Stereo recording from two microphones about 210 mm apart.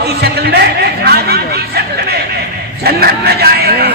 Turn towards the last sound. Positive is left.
turn(degrees=-50)  # may be behind; listen again after turning